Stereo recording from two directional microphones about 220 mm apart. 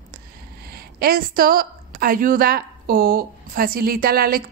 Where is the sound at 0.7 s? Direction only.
45° right (ahead or behind).